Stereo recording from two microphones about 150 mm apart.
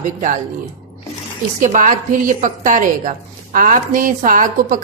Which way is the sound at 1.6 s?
60° right (ahead or behind).